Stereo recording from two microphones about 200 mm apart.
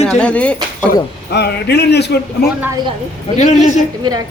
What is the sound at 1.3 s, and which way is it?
Speech, 55° left (ahead or behind).